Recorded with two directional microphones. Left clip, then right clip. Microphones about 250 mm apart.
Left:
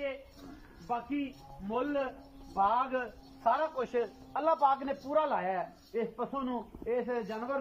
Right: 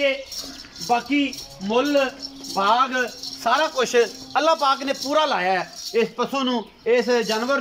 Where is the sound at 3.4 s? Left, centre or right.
Right.